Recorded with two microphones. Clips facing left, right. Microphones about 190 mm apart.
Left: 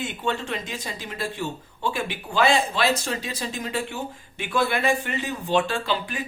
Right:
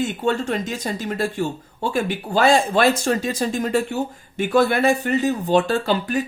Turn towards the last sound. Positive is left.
turn(degrees=-45)  # may be behind; listen again after turning